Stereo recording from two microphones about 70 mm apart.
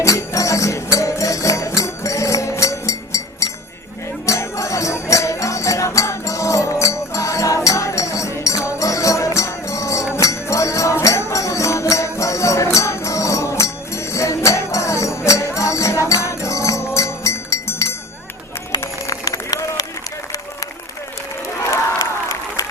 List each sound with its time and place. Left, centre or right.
0.0 s music: left
19.0 s run: left
21.6 s crowd: left